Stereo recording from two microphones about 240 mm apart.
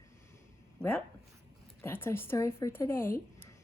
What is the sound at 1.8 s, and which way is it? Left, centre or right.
A woman's voice, centre.